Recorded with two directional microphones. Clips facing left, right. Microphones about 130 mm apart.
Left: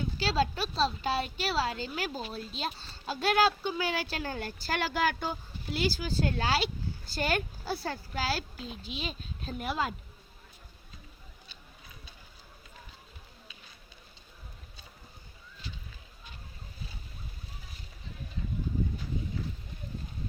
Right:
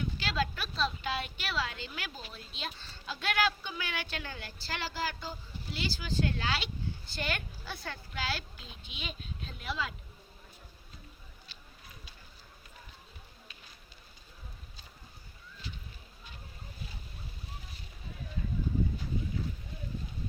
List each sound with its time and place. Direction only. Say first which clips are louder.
0.0 s a woman's voice: left 4 dB; 35° left (ahead or behind); by 5.8 s 60° left (ahead or behind)
5.8 s a woman's voice: left 3 dB; 40° left (ahead or behind)
9.6 s speech: left 5 dB; 50° left (ahead or behind)